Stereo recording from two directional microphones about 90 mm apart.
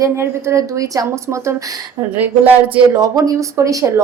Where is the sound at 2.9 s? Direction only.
45° right (ahead or behind).